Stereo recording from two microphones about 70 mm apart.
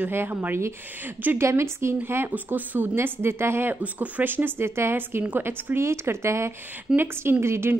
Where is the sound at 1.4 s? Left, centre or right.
Right.